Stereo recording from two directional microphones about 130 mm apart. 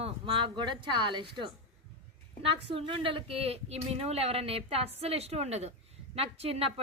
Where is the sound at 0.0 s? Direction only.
40° right (ahead or behind).